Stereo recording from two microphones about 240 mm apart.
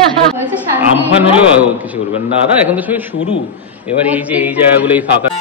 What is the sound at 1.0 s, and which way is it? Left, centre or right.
A man's voice, centre.